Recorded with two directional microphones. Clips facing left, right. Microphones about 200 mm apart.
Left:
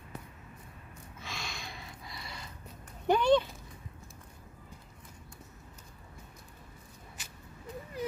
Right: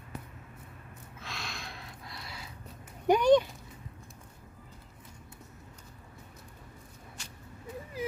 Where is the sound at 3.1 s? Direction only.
15° right (ahead or behind).